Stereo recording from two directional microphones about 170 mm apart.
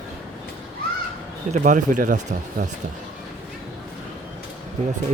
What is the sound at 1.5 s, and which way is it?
Speech, 45° right (ahead or behind).